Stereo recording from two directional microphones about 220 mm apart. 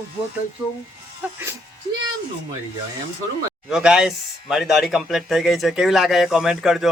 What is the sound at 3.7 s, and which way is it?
Speech, centre (ahead or behind).